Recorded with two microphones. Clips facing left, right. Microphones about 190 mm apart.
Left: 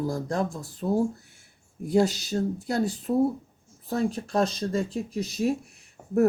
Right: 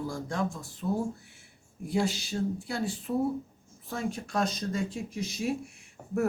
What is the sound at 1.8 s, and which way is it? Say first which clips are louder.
Speech: left 6 dB; 40° left (ahead or behind).